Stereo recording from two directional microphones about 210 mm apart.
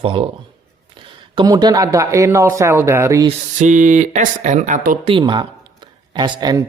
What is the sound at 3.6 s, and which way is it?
Speech, 35° right (ahead or behind).